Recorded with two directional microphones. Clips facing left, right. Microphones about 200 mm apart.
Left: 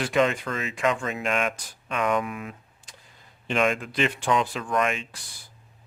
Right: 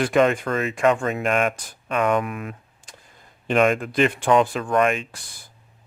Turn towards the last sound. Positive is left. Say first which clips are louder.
# right 5 dB
turn(degrees=-50)  # may be behind; listen again after turning